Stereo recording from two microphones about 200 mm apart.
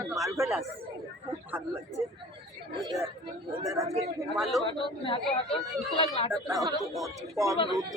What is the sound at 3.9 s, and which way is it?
Speech, centre (ahead or behind).